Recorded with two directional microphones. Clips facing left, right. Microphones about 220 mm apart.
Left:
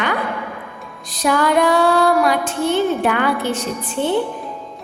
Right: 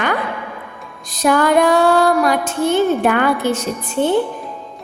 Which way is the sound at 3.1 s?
45° right (ahead or behind).